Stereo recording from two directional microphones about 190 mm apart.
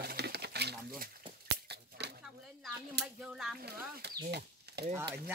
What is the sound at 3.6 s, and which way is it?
Speech, 55° right (ahead or behind).